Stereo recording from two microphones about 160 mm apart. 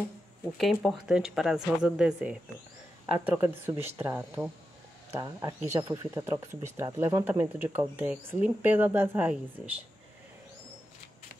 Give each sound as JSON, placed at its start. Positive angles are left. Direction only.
{"t": 0.6, "sound": "speech", "side_deg": 0}